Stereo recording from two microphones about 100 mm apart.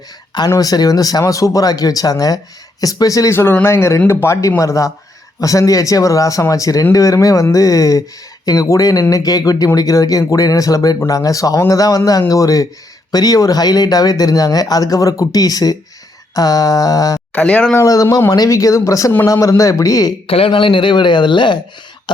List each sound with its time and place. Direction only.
0.3 s speech: 40° left (ahead or behind)
3.3 s speech: 25° left (ahead or behind)
17.3 s speech: 10° left (ahead or behind)
17.7 s speech: 35° left (ahead or behind)
20.2 s speech: 70° left (ahead or behind); by 21.6 s 50° left (ahead or behind)